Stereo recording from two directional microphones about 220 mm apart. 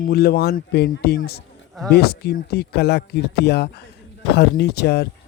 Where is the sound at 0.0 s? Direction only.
45° left (ahead or behind).